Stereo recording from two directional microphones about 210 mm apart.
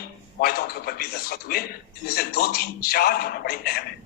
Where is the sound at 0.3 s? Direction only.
45° left (ahead or behind).